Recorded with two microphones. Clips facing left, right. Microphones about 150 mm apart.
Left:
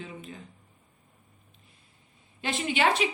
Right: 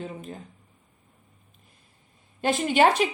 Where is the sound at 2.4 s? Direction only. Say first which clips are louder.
Right 6 dB; 45° right (ahead or behind).